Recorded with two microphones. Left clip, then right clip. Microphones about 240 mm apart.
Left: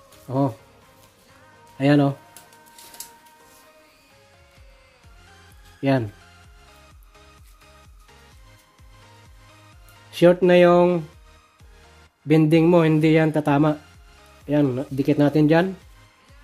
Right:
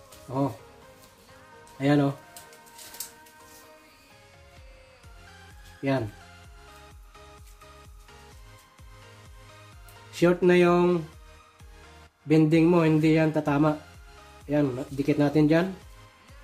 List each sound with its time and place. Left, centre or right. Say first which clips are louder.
0.3 s speech: left 5 dB; left
1.8 s speech: left 5 dB; left
5.8 s speech: left 6 dB; left
10.1 s speech: left 6 dB; left
12.3 s speech: left 4 dB; left